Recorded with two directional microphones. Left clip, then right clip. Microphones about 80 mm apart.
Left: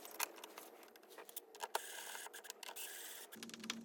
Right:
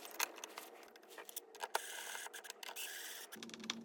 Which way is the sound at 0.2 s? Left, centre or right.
Centre.